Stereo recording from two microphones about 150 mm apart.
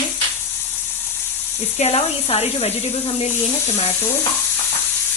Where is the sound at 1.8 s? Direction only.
45° left (ahead or behind).